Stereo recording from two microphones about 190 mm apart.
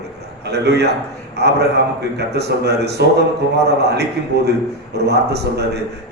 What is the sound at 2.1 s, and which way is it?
A man's voice, 60° right (ahead or behind).